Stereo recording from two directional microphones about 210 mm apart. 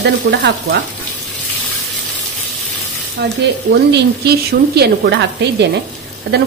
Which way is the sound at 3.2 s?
50° right (ahead or behind).